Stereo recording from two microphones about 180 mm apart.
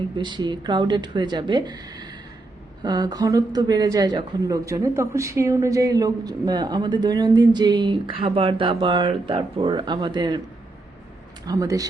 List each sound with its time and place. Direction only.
0.2 s a woman's voice: 25° right (ahead or behind)
11.4 s a woman's voice: 20° right (ahead or behind)